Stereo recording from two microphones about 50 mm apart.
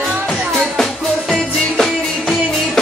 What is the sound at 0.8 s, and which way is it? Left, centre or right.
Music, centre.